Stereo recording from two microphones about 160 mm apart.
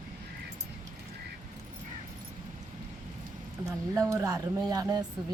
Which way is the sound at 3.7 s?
20° right (ahead or behind).